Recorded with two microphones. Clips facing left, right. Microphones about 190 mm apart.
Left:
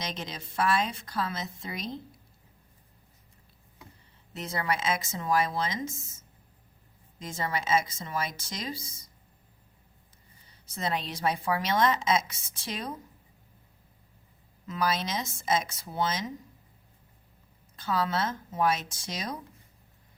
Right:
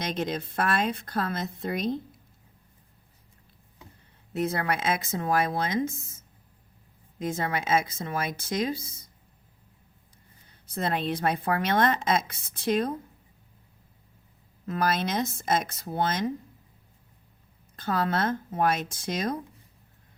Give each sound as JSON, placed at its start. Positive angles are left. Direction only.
{"t": 0.0, "sound": "a woman's voice", "side_deg": -55}
{"t": 4.4, "sound": "a woman's voice", "side_deg": -55}
{"t": 7.2, "sound": "a woman's voice", "side_deg": -55}
{"t": 10.5, "sound": "a woman's voice", "side_deg": -55}
{"t": 14.7, "sound": "a woman's voice", "side_deg": -55}
{"t": 17.7, "sound": "a woman's voice", "side_deg": -55}